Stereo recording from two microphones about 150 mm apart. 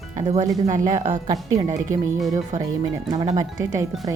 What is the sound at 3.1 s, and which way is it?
Speech, 45° right (ahead or behind).